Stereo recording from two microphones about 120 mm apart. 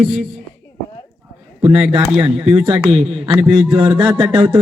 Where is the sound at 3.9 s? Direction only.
40° right (ahead or behind).